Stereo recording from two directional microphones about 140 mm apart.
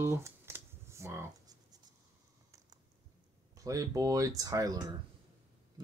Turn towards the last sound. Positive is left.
turn(degrees=-25)  # may be behind; listen again after turning